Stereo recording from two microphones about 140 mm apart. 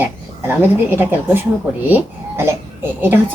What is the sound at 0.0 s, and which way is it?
A woman's voice, 15° right (ahead or behind).